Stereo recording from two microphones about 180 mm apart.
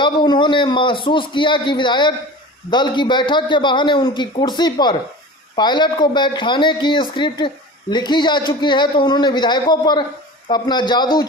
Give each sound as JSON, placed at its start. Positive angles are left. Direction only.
{"t": 0.0, "sound": "speech", "side_deg": 25}